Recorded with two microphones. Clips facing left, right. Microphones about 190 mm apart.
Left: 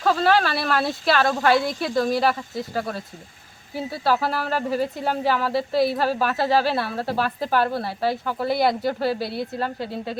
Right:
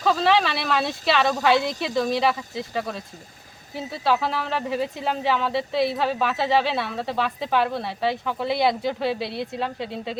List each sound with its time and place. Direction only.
0.2 s speech: centre (ahead or behind)